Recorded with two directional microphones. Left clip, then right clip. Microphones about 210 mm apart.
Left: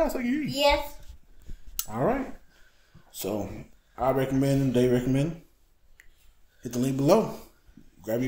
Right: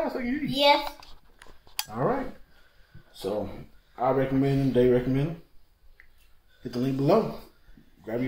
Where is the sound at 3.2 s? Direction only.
60° left (ahead or behind).